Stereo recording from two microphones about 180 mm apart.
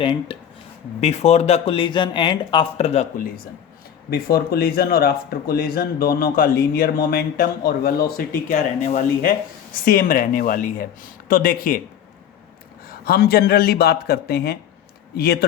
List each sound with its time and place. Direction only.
0.0 s speech: 25° left (ahead or behind)
1.0 s speech: 35° left (ahead or behind)
4.1 s speech: 60° left (ahead or behind)
8.4 s speech: 45° left (ahead or behind)
12.8 s speech: 55° left (ahead or behind)